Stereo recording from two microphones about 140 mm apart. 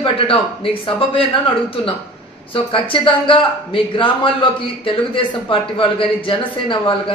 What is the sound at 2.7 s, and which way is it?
A man's voice, 40° left (ahead or behind).